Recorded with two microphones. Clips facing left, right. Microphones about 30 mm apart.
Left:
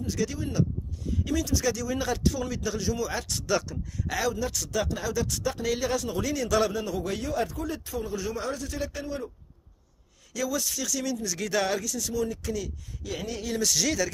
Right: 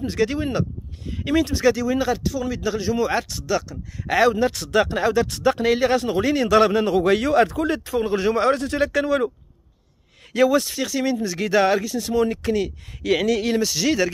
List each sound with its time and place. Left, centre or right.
0.0 s speech: right; by 2.2 s centre
2.2 s speech: centre
2.5 s speech: right
3.3 s speech: centre
3.7 s speech: right
10.3 s speech: right
13.0 s speech: right
13.6 s speech: right